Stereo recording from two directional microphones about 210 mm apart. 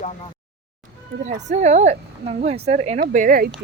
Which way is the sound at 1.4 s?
35° right (ahead or behind).